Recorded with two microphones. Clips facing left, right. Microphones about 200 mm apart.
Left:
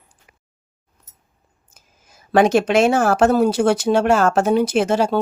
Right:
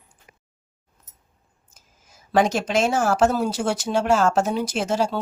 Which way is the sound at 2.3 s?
60° left (ahead or behind).